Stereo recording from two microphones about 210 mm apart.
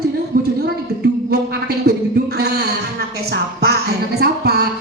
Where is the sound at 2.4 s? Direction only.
50° right (ahead or behind).